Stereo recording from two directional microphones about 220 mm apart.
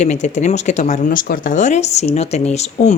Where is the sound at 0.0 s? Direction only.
30° left (ahead or behind).